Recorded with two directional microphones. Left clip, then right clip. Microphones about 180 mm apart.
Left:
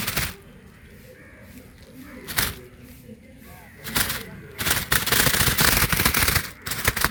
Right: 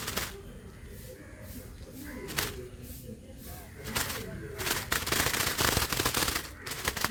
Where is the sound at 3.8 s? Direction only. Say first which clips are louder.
Left 8 dB; 55° left (ahead or behind).